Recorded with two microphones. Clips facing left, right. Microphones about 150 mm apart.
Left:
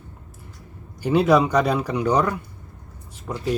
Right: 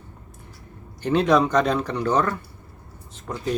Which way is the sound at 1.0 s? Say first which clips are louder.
Left 1 dB; 10° left (ahead or behind).